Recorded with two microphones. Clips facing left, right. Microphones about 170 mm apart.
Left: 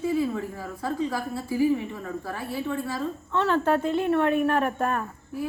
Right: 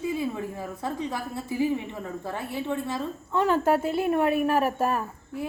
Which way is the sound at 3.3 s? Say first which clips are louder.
Right 1 dB; 10° right (ahead or behind).